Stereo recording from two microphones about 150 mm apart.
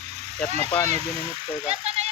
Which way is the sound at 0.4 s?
45° right (ahead or behind).